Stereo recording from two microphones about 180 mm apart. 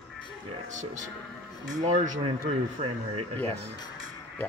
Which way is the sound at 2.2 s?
30° right (ahead or behind).